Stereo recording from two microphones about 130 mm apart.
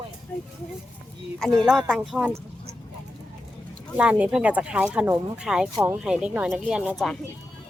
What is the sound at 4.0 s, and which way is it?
Speech, 10° right (ahead or behind).